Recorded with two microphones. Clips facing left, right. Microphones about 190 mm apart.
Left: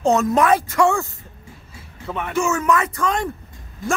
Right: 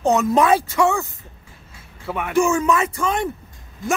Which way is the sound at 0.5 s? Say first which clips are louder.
Even; 30° right (ahead or behind).